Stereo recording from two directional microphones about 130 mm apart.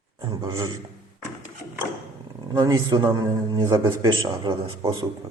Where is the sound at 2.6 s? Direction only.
30° right (ahead or behind).